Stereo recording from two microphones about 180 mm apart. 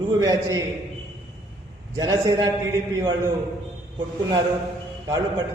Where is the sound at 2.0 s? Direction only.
20° right (ahead or behind).